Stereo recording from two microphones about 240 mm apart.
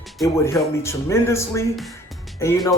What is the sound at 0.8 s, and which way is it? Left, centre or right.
Speech, centre.